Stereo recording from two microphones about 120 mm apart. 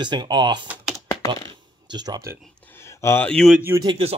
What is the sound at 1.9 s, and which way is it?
Speech, 35° right (ahead or behind).